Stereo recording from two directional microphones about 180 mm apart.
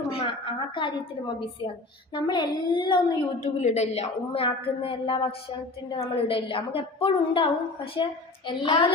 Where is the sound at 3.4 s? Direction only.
40° left (ahead or behind).